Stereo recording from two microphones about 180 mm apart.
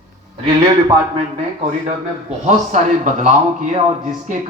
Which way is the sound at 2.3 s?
40° right (ahead or behind).